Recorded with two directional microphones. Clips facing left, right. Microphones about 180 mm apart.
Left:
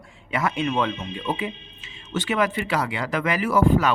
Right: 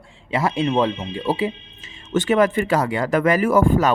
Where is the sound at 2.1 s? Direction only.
45° right (ahead or behind).